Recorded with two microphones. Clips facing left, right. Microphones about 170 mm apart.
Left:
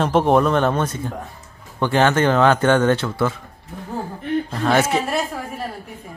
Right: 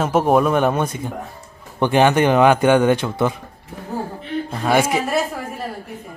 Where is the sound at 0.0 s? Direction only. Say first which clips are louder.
Even; 5° right (ahead or behind).